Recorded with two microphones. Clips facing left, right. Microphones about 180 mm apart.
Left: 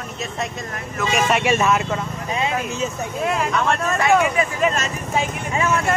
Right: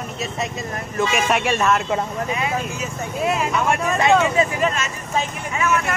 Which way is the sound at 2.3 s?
25° left (ahead or behind).